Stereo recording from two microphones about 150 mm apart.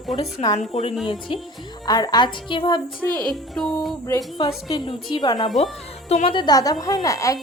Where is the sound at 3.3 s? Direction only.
5° left (ahead or behind).